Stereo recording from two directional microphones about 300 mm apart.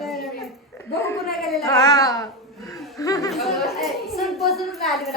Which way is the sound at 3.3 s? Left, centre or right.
Centre.